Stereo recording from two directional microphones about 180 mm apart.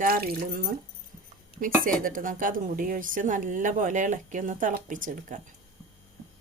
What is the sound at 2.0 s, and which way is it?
Speech, 50° right (ahead or behind).